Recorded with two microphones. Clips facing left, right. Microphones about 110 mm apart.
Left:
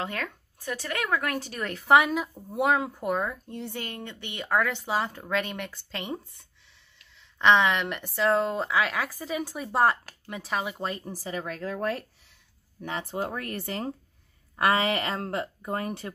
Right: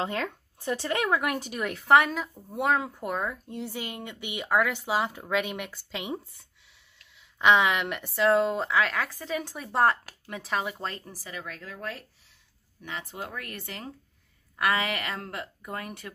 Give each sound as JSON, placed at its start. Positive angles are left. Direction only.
{"t": 0.0, "sound": "speech", "side_deg": -25}
{"t": 11.1, "sound": "speech", "side_deg": 35}